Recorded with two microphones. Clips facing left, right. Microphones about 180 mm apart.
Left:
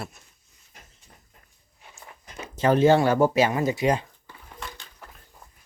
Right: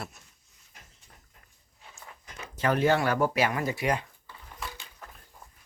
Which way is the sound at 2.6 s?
25° left (ahead or behind).